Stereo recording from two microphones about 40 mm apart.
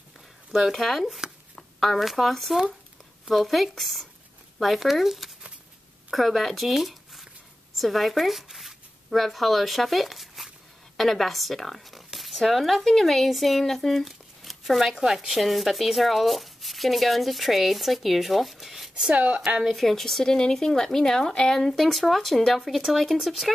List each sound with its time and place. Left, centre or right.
0.7 s speech: centre
1.0 s speech: centre
1.8 s speech: centre
19.0 s speech: right
19.8 s speech: centre